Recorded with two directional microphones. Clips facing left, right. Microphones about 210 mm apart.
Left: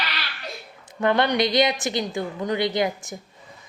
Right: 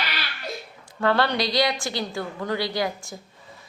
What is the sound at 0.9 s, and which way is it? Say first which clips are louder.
A woman's voice: left 1 dB; 20° left (ahead or behind).